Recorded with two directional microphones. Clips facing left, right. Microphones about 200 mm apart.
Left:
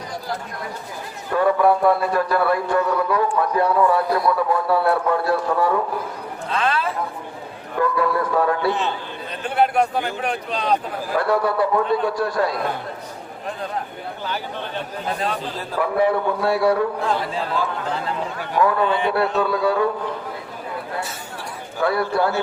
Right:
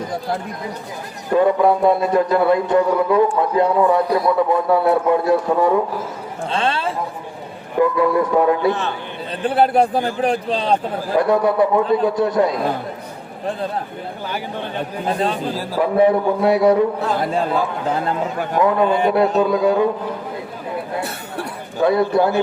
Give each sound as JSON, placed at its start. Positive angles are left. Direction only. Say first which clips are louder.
{"t": 1.3, "sound": "a man's voice", "louder": "right 3 dB", "side_deg": -20}
{"t": 7.8, "sound": "a man's voice", "louder": "right 5 dB", "side_deg": -20}
{"t": 9.5, "sound": "a man's voice", "louder": "right 3 dB", "side_deg": -35}
{"t": 11.2, "sound": "a man's voice", "louder": "right 4 dB", "side_deg": -20}
{"t": 15.8, "sound": "a man's voice", "louder": "right 4 dB", "side_deg": -20}
{"t": 17.2, "sound": "speech", "louder": "right 5 dB", "side_deg": -50}
{"t": 18.6, "sound": "a man's voice", "louder": "right 3 dB", "side_deg": -20}
{"t": 18.9, "sound": "speech", "louder": "right 4 dB", "side_deg": -45}
{"t": 19.4, "sound": "a man's voice", "louder": "right 4 dB", "side_deg": -20}
{"t": 21.8, "sound": "a man's voice", "louder": "right 5 dB", "side_deg": -20}